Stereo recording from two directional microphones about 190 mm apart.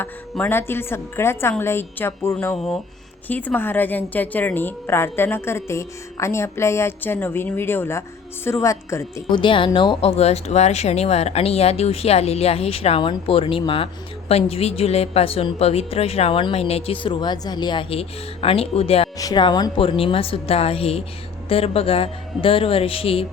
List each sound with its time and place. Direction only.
0.0 s a woman's voice: 10° left (ahead or behind); by 23.2 s 30° left (ahead or behind)